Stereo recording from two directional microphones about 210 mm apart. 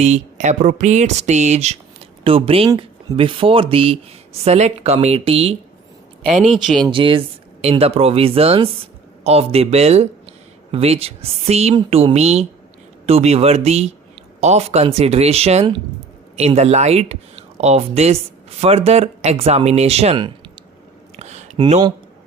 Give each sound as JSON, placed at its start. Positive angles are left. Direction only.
{"t": 0.0, "sound": "speech", "side_deg": -35}
{"t": 6.3, "sound": "speech", "side_deg": 0}
{"t": 6.7, "sound": "speech", "side_deg": -25}
{"t": 21.2, "sound": "a sound", "side_deg": -30}